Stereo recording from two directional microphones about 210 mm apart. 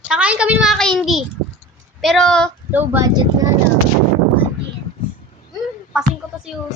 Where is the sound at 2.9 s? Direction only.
15° right (ahead or behind).